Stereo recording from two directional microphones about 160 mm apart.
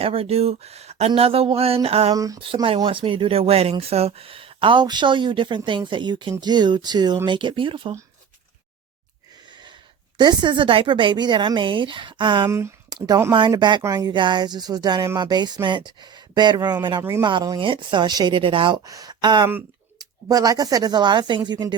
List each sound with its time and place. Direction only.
0.0 s speech: 35° right (ahead or behind)
2.1 s speech: 20° right (ahead or behind)
2.4 s speech: 35° right (ahead or behind)
10.2 s speech: 30° right (ahead or behind)
12.5 s speech: 15° right (ahead or behind)
17.0 s speech: 15° right (ahead or behind)
17.2 s speech: 25° right (ahead or behind)